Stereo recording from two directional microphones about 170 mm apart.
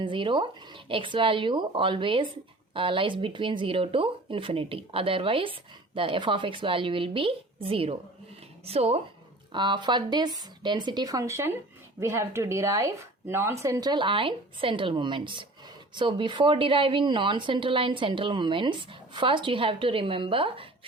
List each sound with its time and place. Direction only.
0.0 s a woman's voice: 30° right (ahead or behind)